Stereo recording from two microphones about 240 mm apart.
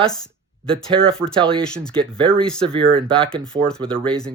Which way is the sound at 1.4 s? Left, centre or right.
Right.